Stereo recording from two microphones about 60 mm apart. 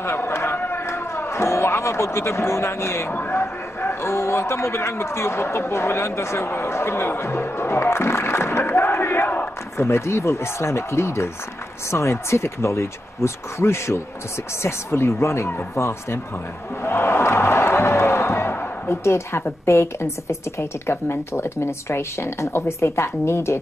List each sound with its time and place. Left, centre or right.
0.0 s a sound: left
3.1 s speech: left
3.3 s a man's voice: left
9.8 s a man's voice: left